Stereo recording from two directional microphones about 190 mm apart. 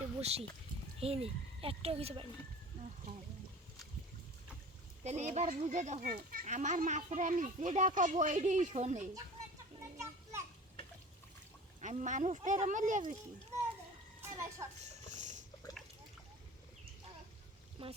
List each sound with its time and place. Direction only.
0.2 s speech: 35° right (ahead or behind)
5.0 s speech: 35° right (ahead or behind)
9.8 s children playing: 15° right (ahead or behind)
11.8 s speech: 40° right (ahead or behind)
14.2 s a sound: 15° right (ahead or behind)
14.8 s a sound: 40° right (ahead or behind)
17.8 s speech: 30° right (ahead or behind)